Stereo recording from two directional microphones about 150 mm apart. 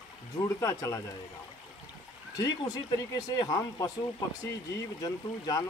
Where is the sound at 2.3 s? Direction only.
25° left (ahead or behind).